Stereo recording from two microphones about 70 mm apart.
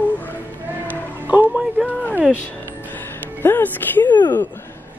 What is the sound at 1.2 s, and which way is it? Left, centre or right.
Music, right.